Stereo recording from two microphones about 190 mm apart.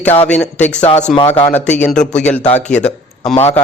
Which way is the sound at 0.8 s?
35° left (ahead or behind).